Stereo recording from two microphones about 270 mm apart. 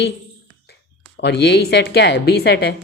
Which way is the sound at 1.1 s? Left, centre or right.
Left.